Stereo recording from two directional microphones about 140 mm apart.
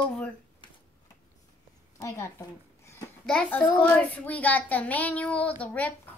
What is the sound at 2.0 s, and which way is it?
Speech, 20° left (ahead or behind).